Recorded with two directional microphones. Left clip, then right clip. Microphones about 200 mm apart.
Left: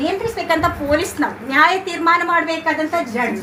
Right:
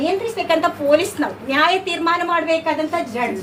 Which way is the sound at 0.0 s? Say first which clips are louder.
Even; 15° right (ahead or behind).